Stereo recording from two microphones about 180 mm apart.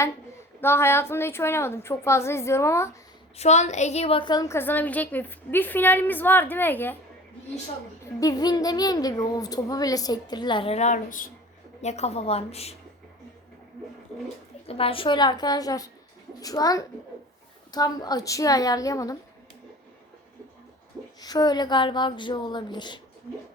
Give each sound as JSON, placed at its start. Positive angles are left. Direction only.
{"t": 0.6, "sound": "a woman's voice", "side_deg": 15}
{"t": 3.3, "sound": "a woman's voice", "side_deg": 40}
{"t": 8.2, "sound": "a woman's voice", "side_deg": 20}
{"t": 14.7, "sound": "speech", "side_deg": 30}
{"t": 21.2, "sound": "speech", "side_deg": 20}